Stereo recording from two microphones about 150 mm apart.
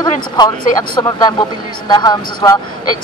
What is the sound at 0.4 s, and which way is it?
Speech, 25° left (ahead or behind).